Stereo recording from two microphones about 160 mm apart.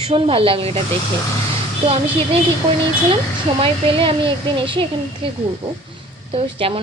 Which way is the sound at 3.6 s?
35° right (ahead or behind).